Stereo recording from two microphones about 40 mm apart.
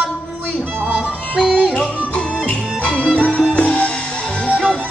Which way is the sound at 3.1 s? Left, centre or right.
Left.